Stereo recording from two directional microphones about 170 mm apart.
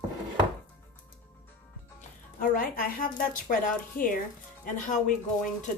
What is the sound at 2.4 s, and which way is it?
A woman's voice, 55° left (ahead or behind).